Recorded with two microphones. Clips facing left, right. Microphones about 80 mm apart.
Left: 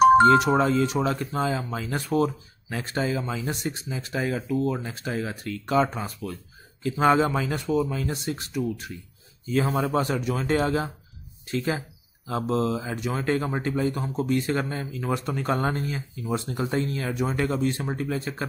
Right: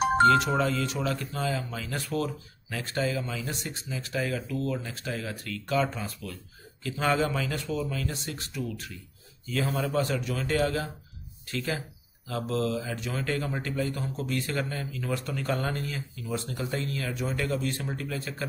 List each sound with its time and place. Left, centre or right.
0.6 s speech: left